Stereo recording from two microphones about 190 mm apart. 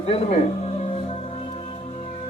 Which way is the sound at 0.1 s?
30° left (ahead or behind).